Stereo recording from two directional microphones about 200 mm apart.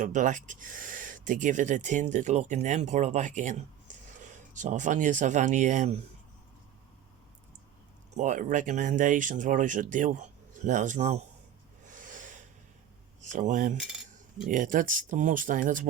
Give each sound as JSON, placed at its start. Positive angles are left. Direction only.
{"t": 0.0, "sound": "speech", "side_deg": -40}
{"t": 8.1, "sound": "speech", "side_deg": -40}
{"t": 11.9, "sound": "a sound", "side_deg": -40}
{"t": 13.3, "sound": "speech", "side_deg": -40}